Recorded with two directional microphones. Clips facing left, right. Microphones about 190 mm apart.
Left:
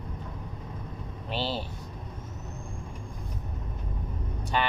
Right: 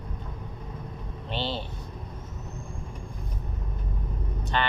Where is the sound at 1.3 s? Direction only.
5° left (ahead or behind).